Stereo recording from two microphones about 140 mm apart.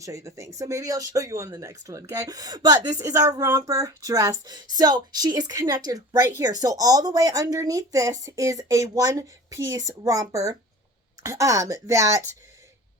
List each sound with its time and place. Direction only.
0.0 s speech: 25° right (ahead or behind)